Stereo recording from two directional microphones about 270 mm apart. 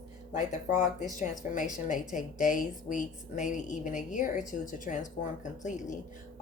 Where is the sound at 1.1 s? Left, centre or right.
Left.